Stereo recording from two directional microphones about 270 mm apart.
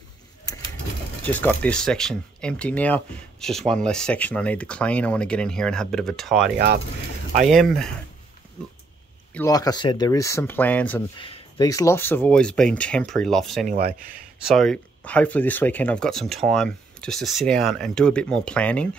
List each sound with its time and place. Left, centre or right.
1.2 s speech: centre
9.3 s speech: centre
11.1 s speech: centre
13.7 s speech: right
14.5 s speech: centre